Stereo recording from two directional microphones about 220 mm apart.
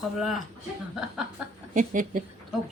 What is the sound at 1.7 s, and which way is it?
Speech, 35° right (ahead or behind).